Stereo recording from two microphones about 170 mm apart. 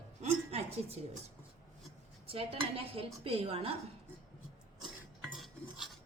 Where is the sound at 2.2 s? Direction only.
35° right (ahead or behind).